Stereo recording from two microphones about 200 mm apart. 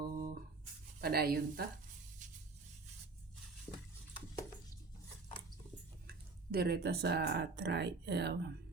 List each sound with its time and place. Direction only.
0.0 s a sound: 50° right (ahead or behind)
1.0 s a woman's voice: 50° right (ahead or behind)
6.5 s speech: 50° right (ahead or behind)